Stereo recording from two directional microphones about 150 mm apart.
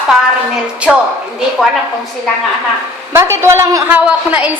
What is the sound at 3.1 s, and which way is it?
A woman's voice, 15° right (ahead or behind).